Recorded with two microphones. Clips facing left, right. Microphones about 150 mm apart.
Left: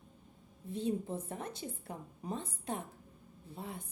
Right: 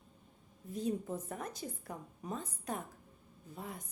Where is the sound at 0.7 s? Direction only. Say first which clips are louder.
Left 1 dB; 30° left (ahead or behind).